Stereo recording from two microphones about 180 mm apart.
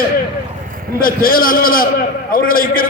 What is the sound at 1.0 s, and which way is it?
A man's voice, 55° left (ahead or behind).